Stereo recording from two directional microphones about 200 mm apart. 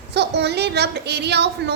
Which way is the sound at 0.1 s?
55° right (ahead or behind).